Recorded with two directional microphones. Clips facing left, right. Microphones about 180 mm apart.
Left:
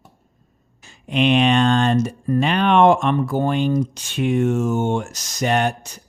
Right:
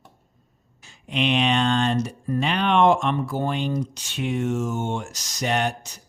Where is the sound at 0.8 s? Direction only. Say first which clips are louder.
Left 6 dB; 50° left (ahead or behind).